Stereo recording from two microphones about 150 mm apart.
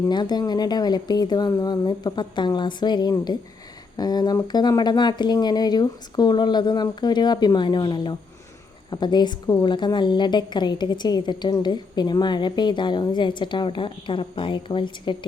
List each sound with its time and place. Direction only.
0.1 s a woman's voice: 30° left (ahead or behind)